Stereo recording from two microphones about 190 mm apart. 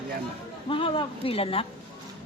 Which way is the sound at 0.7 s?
25° left (ahead or behind).